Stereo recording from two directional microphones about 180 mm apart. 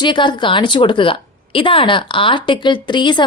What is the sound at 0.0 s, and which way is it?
A woman's voice, 25° left (ahead or behind).